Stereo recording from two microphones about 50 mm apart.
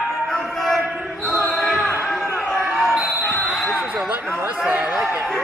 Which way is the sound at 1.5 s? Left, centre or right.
Centre.